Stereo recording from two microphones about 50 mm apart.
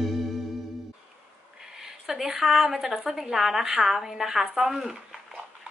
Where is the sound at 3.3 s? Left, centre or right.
Centre.